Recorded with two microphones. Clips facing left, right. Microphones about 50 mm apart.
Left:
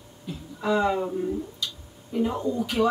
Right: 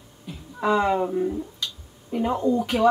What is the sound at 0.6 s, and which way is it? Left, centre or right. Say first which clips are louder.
Speech: right 2 dB; right.